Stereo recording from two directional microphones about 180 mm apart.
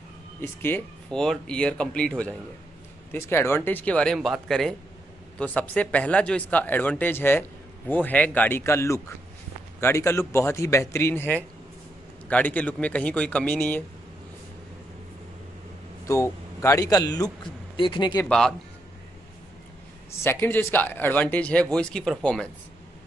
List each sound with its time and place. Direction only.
0.4 s speech: 10° left (ahead or behind)
16.1 s a man's voice: 15° left (ahead or behind)
20.2 s speech: 10° left (ahead or behind)